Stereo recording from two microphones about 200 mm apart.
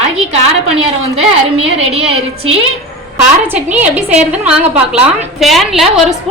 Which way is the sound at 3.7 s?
5° right (ahead or behind).